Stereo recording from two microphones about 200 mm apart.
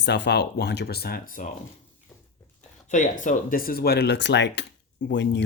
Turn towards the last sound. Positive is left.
turn(degrees=60)  # may be behind; listen again after turning